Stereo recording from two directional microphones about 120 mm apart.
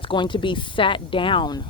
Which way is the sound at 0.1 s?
45° left (ahead or behind).